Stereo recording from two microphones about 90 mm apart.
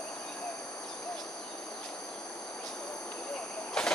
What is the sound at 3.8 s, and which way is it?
Vehicle, 5° left (ahead or behind).